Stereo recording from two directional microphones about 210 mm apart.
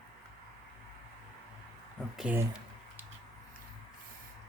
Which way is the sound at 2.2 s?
5° right (ahead or behind).